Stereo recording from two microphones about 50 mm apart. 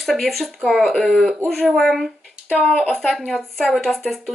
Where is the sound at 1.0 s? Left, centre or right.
Centre.